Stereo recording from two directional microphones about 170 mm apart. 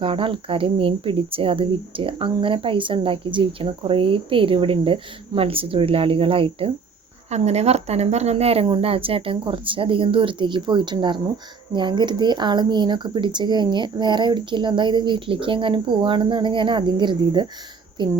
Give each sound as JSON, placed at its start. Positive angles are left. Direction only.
{"t": 0.0, "sound": "speech", "side_deg": -30}